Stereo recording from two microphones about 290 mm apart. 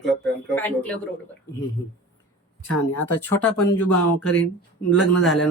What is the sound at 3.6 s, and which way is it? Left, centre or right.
Speech, left.